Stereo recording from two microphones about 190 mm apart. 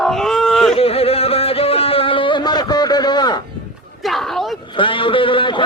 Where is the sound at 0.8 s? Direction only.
30° left (ahead or behind).